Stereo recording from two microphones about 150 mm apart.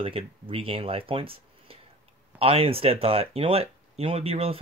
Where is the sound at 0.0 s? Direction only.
40° right (ahead or behind).